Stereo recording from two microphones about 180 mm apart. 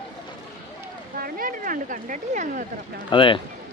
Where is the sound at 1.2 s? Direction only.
55° right (ahead or behind).